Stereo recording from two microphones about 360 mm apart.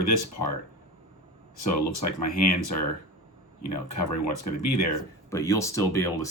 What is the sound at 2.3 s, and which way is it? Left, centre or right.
Speech, left.